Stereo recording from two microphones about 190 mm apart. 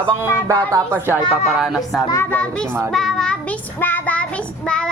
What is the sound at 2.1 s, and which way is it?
Speech, 10° left (ahead or behind).